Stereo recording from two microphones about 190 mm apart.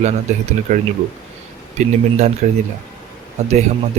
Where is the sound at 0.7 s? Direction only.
40° right (ahead or behind).